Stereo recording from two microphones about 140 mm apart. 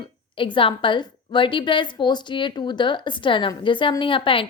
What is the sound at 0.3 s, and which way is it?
A woman's voice, 35° left (ahead or behind).